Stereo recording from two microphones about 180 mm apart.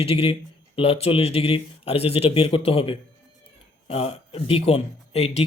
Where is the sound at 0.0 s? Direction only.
30° left (ahead or behind).